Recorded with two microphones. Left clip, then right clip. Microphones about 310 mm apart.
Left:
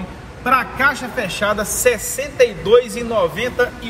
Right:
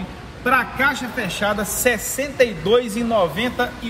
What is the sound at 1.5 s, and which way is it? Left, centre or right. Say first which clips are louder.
A man's voice: left 4 dB; centre.